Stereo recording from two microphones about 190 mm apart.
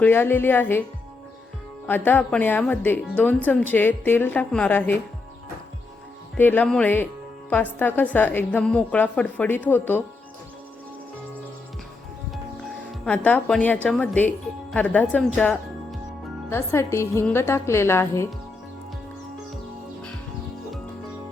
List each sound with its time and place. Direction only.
0.0 s speech: 10° left (ahead or behind)
1.9 s speech: 10° left (ahead or behind)
6.3 s speech: 10° left (ahead or behind)
12.3 s speech: centre (ahead or behind)
16.5 s speech: 15° left (ahead or behind)